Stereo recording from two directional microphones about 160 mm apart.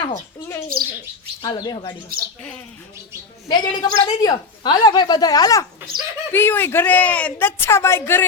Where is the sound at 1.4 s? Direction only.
30° left (ahead or behind).